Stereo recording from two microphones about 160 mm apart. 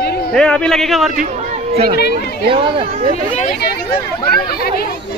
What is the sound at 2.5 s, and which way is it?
Speech, 35° right (ahead or behind).